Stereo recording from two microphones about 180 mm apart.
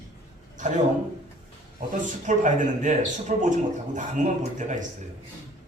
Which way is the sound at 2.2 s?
45° right (ahead or behind).